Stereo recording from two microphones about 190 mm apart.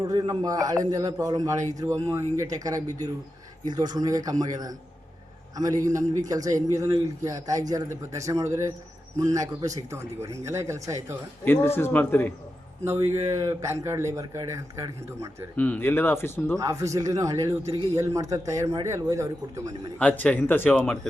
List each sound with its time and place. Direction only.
0.0 s a man's voice: 20° right (ahead or behind)
11.4 s speech: 10° left (ahead or behind)
12.8 s a man's voice: 15° right (ahead or behind)
15.5 s speech: 10° left (ahead or behind)
16.6 s a man's voice: 15° right (ahead or behind)
20.0 s speech: 5° left (ahead or behind)